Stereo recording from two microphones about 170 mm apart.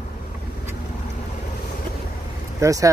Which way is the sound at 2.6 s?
20° right (ahead or behind).